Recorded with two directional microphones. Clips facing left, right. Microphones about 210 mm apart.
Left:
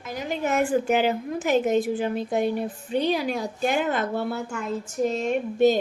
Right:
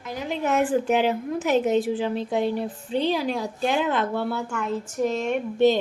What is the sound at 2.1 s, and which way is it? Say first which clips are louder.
Speech: even; 45° left (ahead or behind).